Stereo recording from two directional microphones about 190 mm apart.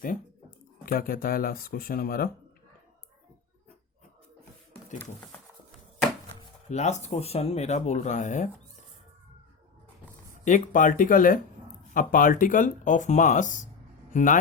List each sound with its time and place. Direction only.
0.9 s speech: 50° left (ahead or behind)
6.7 s speech: 35° left (ahead or behind)
10.4 s speech: 40° left (ahead or behind)